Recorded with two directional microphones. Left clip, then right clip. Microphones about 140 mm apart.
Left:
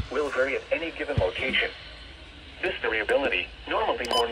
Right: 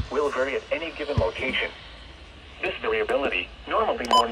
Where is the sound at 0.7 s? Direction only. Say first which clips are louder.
Even; 50° right (ahead or behind).